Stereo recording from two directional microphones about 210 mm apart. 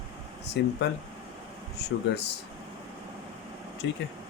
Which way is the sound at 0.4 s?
55° left (ahead or behind).